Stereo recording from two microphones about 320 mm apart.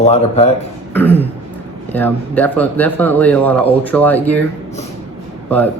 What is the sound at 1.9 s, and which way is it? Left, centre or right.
A woman's voice, centre.